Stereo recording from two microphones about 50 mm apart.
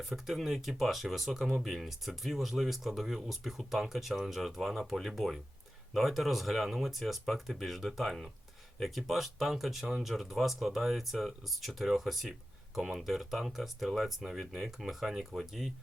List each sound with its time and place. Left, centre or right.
0.1 s speech: centre